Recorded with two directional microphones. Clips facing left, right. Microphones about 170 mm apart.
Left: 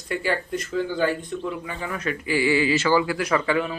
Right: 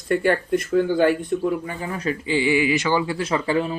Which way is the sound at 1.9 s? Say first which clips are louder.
Right 2 dB; 30° right (ahead or behind).